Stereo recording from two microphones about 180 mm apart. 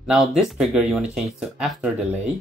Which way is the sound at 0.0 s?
Centre (ahead or behind).